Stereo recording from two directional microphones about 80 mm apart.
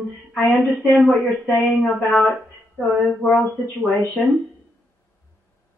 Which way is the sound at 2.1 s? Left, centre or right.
Centre.